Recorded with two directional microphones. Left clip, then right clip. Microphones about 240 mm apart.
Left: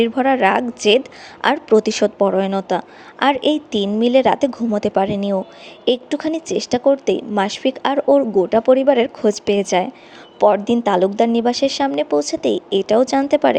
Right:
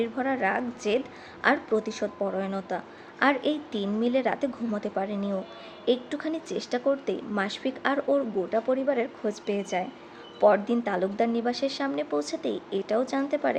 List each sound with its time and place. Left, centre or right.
0.0 s a woman's voice: left